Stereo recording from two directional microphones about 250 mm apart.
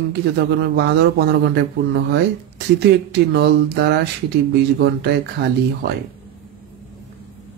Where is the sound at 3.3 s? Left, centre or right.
Right.